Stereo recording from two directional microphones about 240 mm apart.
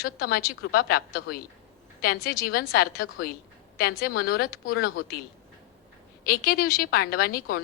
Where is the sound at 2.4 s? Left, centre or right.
Left.